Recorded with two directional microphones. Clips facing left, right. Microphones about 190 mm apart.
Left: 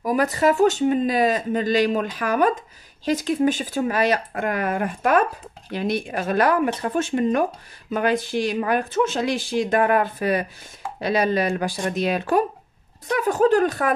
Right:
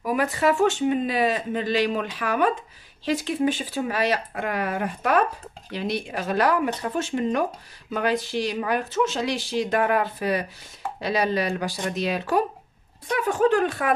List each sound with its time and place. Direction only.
0.0 s speech: 40° left (ahead or behind)
13.1 s speech: 40° left (ahead or behind)